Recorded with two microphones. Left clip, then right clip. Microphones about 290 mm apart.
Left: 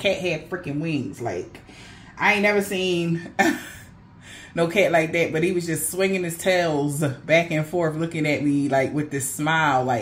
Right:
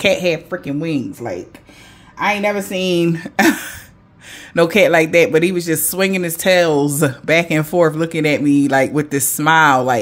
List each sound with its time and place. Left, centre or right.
0.0 s speech: right
2.1 s speech: right